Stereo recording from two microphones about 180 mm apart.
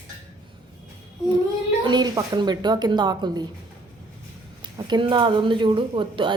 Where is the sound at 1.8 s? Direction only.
20° right (ahead or behind).